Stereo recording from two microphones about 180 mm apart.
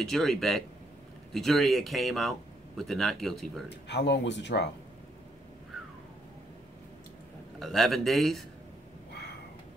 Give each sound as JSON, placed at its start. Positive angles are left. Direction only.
{"t": 0.0, "sound": "speech", "side_deg": 0}
{"t": 3.6, "sound": "speech", "side_deg": 70}
{"t": 7.5, "sound": "speech", "side_deg": 0}